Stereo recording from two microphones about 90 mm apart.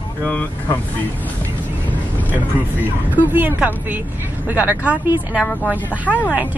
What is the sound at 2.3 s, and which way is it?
Speech, 20° right (ahead or behind).